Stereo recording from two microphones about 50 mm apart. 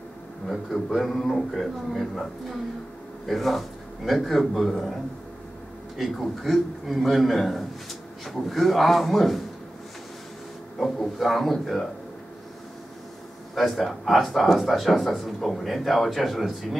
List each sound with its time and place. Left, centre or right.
0.5 s speech: centre
3.3 s speech: centre
5.9 s speech: centre
10.8 s speech: centre
13.6 s speech: centre